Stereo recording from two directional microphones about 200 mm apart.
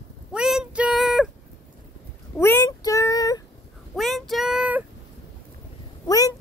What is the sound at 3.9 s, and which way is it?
Child singing, centre (ahead or behind).